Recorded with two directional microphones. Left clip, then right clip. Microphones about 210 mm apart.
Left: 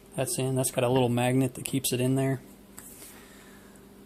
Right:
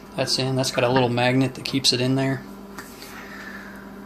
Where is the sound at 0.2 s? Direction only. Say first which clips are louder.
Right 6 dB; 50° left (ahead or behind).